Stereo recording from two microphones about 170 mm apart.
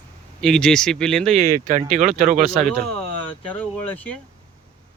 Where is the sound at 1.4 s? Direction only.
55° right (ahead or behind).